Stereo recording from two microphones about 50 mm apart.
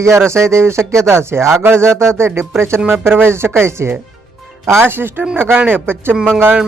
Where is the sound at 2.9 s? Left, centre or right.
Right.